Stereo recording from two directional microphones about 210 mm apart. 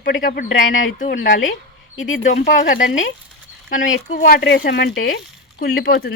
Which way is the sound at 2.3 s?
45° left (ahead or behind).